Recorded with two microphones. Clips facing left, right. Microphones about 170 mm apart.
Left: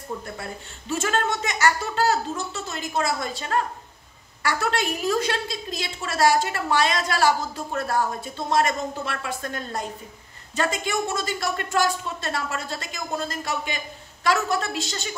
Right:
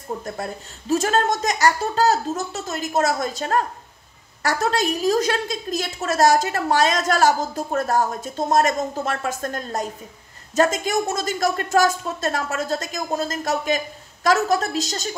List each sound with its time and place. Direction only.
0.2 s a woman's voice: 40° right (ahead or behind)